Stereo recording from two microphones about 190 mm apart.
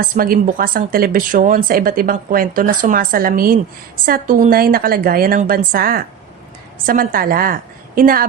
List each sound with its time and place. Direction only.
0.0 s speech: 50° right (ahead or behind)